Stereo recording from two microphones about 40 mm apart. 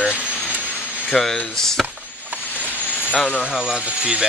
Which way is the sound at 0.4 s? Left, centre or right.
Left.